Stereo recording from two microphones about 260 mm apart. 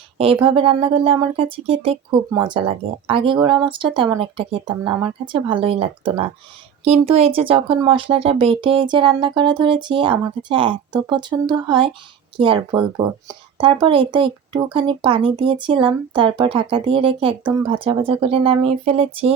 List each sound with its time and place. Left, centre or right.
0.2 s speech: right